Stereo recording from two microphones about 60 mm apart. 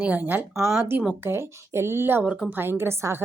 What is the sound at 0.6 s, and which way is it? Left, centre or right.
Speech, right.